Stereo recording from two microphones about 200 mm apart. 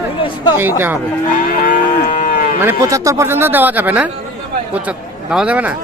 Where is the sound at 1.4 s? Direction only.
45° left (ahead or behind).